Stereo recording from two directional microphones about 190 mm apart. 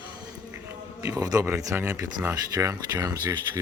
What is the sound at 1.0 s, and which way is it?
Speech, 15° right (ahead or behind).